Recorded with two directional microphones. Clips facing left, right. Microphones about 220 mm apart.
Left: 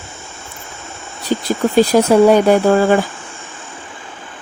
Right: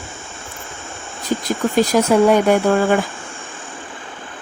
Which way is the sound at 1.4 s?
30° left (ahead or behind).